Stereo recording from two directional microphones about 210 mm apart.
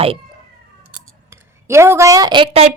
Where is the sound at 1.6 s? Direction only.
15° right (ahead or behind); by 2.8 s 30° right (ahead or behind).